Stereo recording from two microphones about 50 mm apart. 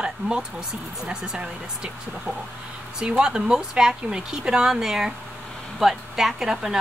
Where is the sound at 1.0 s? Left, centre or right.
Centre.